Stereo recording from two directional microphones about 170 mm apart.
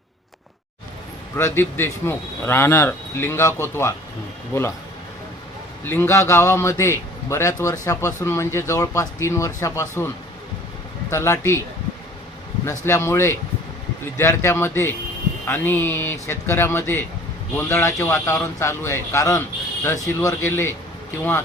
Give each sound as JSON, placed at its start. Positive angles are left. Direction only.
{"t": 1.4, "sound": "a man's voice", "side_deg": 15}
{"t": 5.8, "sound": "a man's voice", "side_deg": 15}
{"t": 11.1, "sound": "a man's voice", "side_deg": 15}
{"t": 12.6, "sound": "a man's voice", "side_deg": 15}